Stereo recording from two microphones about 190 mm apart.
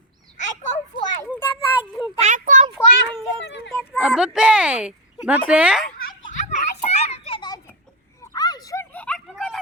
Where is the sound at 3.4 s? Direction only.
65° left (ahead or behind).